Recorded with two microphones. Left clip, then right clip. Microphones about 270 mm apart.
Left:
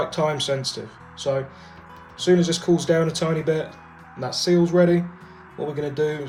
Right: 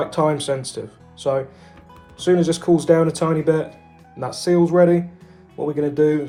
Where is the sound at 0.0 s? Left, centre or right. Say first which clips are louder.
Right 3 dB; centre.